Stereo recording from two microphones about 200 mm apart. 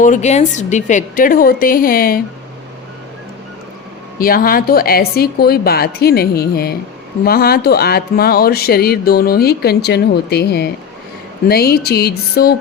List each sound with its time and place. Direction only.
0.0 s speech: 35° left (ahead or behind)
4.2 s speech: 45° left (ahead or behind)